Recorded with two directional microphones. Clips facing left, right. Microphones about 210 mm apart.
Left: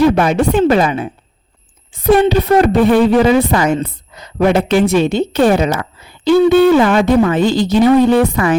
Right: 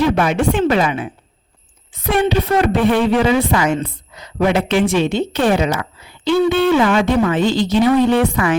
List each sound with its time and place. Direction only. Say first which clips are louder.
0.0 s a woman's voice: left 4 dB; 40° left (ahead or behind)